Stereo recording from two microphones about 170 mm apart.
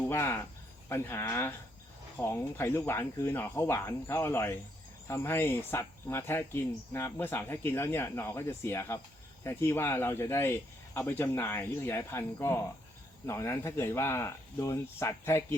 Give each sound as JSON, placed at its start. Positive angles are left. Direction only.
{"t": 0.0, "sound": "speech", "side_deg": 15}